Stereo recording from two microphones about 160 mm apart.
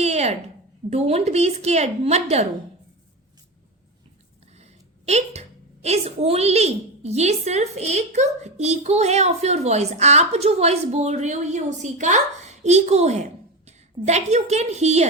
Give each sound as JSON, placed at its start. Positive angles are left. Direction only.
{"t": 0.0, "sound": "a sound", "side_deg": -45}
{"t": 0.9, "sound": "a woman's voice", "side_deg": -40}
{"t": 4.5, "sound": "a woman's voice", "side_deg": -45}